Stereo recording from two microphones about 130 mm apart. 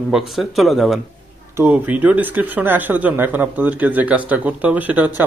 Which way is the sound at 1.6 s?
15° right (ahead or behind).